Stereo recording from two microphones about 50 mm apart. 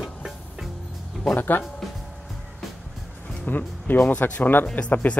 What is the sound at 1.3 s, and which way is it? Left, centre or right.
Speech, left.